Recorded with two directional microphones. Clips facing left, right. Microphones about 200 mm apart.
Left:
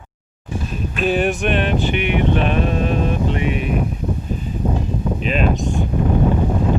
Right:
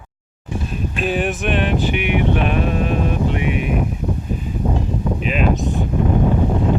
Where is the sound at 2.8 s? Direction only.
15° right (ahead or behind).